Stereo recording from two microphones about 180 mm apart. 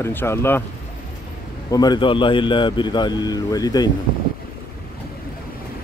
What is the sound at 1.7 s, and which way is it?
Speech, 20° left (ahead or behind).